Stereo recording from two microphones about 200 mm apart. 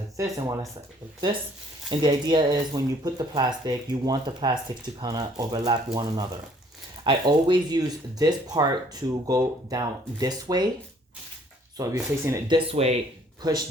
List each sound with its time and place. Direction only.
0.2 s speech: 15° right (ahead or behind)
1.9 s speech: 20° right (ahead or behind)
11.8 s speech: 15° right (ahead or behind)
12.5 s speech: 30° right (ahead or behind)